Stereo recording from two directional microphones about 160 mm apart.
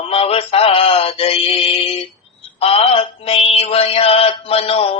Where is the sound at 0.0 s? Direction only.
35° left (ahead or behind).